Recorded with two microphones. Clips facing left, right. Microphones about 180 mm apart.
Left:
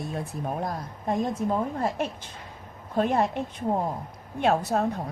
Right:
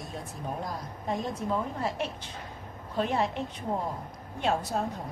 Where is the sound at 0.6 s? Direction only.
50° left (ahead or behind).